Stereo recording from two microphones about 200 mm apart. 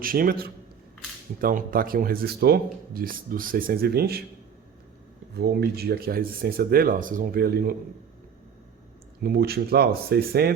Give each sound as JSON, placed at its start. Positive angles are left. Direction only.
{"t": 0.0, "sound": "a man's voice", "side_deg": -45}
{"t": 5.4, "sound": "a man's voice", "side_deg": -55}
{"t": 9.2, "sound": "a man's voice", "side_deg": -50}